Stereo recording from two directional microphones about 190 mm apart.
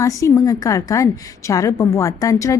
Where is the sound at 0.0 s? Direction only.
15° left (ahead or behind).